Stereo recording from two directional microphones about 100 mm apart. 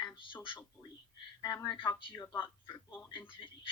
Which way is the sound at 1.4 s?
40° left (ahead or behind).